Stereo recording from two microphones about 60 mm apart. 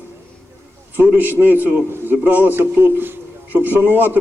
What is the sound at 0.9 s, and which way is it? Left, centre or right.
A man's voice, right.